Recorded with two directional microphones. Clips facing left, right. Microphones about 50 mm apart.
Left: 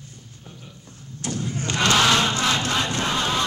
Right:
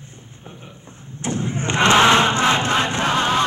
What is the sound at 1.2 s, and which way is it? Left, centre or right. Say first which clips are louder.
Crowd: right 4 dB; right.